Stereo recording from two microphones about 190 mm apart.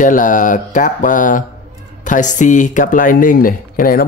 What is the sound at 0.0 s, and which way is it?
Speech, 45° left (ahead or behind).